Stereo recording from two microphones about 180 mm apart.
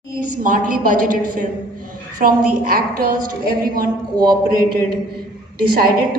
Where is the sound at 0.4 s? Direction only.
50° right (ahead or behind).